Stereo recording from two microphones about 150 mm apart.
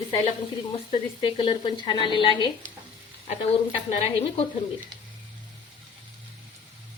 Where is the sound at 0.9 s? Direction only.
35° left (ahead or behind).